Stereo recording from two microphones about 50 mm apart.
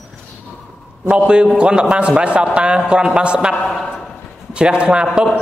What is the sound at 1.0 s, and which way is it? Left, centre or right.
A man's voice, right.